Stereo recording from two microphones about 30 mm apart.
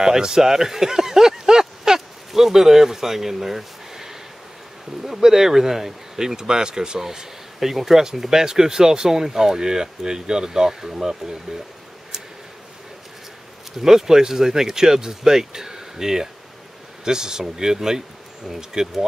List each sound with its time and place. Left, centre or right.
0.0 s speech: right
5.2 s speech: centre
7.0 s speech: centre
13.7 s speech: centre